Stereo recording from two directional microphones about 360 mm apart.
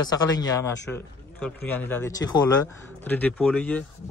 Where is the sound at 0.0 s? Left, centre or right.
Centre.